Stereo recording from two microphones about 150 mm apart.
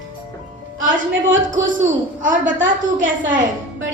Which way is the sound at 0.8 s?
60° right (ahead or behind).